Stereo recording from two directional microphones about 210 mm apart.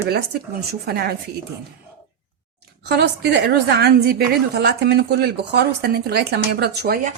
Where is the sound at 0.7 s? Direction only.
50° right (ahead or behind).